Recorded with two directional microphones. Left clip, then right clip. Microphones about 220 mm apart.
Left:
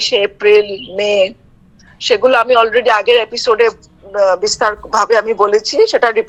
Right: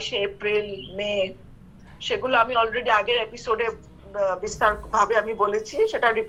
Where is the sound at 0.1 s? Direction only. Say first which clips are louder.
Left 14 dB; 50° left (ahead or behind).